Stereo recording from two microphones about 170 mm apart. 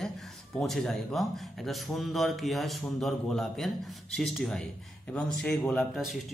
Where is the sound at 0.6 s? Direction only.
Centre (ahead or behind).